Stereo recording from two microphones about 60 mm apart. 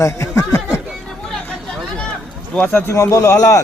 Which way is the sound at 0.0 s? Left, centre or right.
Left.